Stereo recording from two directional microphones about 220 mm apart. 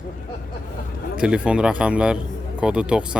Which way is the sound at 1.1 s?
5° right (ahead or behind).